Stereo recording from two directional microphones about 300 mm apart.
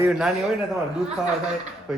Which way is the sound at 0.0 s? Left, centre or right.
Centre.